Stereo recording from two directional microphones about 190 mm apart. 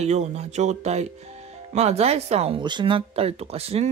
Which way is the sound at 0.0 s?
35° right (ahead or behind).